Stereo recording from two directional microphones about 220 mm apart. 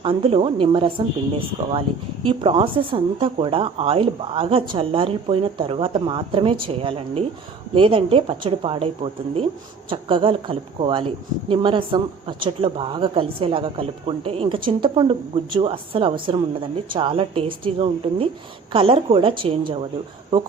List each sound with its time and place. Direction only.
0.0 s speech: 25° right (ahead or behind)